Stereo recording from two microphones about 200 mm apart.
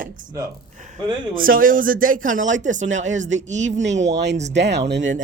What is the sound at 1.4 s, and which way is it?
A man's voice, 45° right (ahead or behind).